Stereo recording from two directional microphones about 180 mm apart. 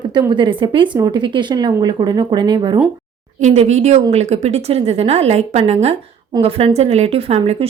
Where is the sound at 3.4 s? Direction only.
40° right (ahead or behind).